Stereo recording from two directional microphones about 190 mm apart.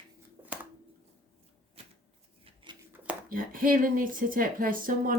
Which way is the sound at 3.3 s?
45° right (ahead or behind).